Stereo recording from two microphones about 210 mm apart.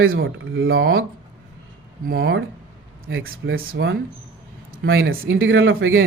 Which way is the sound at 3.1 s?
65° right (ahead or behind).